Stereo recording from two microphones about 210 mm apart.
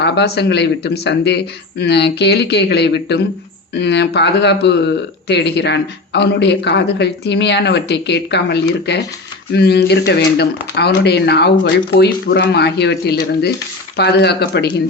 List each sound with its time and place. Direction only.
0.0 s speech: 55° left (ahead or behind)